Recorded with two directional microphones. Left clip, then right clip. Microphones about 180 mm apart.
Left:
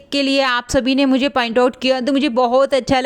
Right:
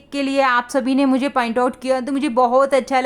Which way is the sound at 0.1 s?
30° left (ahead or behind).